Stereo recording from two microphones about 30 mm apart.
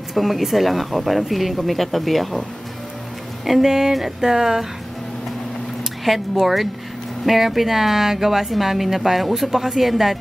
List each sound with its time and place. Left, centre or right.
0.1 s speech: centre
3.4 s speech: centre
6.0 s speech: centre